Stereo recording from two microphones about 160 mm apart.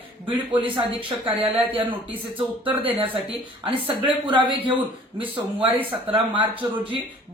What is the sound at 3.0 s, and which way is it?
Speech, 35° right (ahead or behind).